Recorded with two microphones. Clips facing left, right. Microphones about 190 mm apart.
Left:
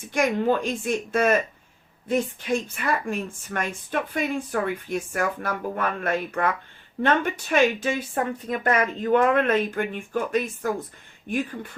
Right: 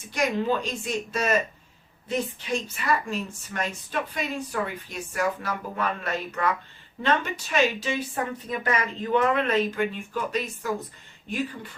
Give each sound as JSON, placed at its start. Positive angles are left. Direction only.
{"t": 0.1, "sound": "speech", "side_deg": 50}